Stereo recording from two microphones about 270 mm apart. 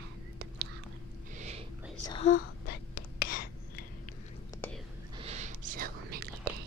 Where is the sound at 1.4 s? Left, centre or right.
Right.